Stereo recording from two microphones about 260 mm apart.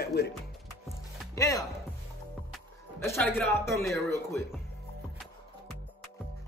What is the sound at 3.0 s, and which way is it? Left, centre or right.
Speech, centre.